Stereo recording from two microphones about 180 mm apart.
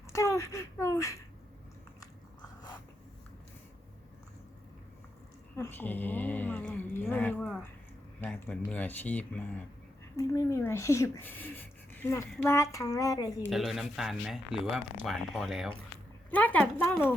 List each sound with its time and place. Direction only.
0.1 s a sound: 15° left (ahead or behind)
5.5 s speech: 10° left (ahead or behind)
13.5 s speech: centre (ahead or behind)